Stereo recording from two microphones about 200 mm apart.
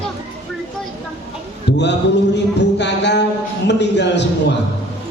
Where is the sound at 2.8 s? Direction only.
60° left (ahead or behind).